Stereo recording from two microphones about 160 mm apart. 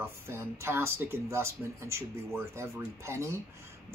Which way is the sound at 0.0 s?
15° right (ahead or behind).